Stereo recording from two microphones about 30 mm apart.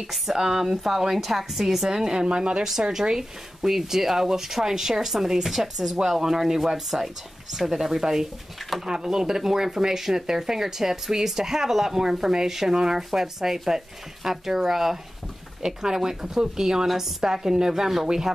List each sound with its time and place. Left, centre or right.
0.4 s speech: centre
2.2 s a woman's voice: right
2.9 s speech: centre